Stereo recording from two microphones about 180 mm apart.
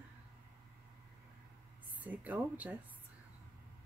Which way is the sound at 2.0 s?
10° right (ahead or behind).